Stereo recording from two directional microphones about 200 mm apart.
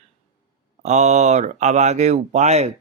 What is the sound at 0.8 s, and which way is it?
Speech, 35° right (ahead or behind).